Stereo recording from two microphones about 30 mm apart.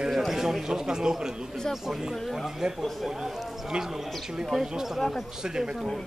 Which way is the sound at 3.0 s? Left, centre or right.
Centre.